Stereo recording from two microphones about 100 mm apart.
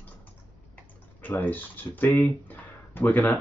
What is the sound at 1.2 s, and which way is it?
Speech, 20° left (ahead or behind).